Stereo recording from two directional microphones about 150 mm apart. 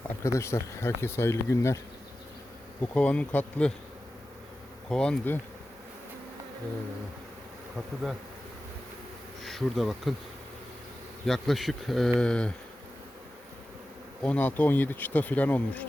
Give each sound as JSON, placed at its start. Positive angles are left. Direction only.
{"t": 0.2, "sound": "bee", "side_deg": 20}
{"t": 2.8, "sound": "bee", "side_deg": 10}
{"t": 4.9, "sound": "bee", "side_deg": 5}
{"t": 9.4, "sound": "speech", "side_deg": 0}
{"t": 11.3, "sound": "speech", "side_deg": 0}
{"t": 12.2, "sound": "bee", "side_deg": 5}
{"t": 14.2, "sound": "bee", "side_deg": 10}